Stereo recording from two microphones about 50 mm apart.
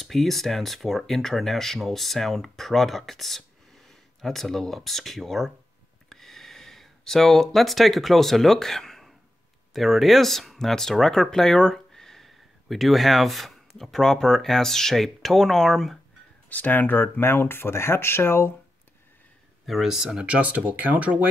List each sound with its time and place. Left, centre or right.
0.0 s speech: centre
6.0 s gasp: centre
9.8 s speech: centre
16.4 s speech: left
17.2 s speech: left
19.6 s speech: centre
20.2 s speech: right